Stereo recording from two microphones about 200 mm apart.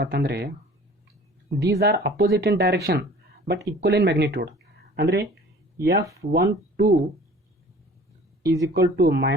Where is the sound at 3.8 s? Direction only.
55° right (ahead or behind).